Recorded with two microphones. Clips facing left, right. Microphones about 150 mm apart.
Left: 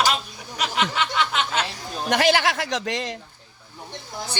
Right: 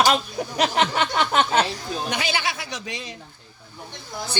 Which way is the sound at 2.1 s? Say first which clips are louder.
Left 7 dB; 85° left.